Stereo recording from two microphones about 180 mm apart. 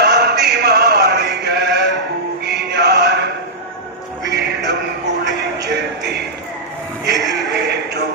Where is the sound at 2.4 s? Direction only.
70° right (ahead or behind).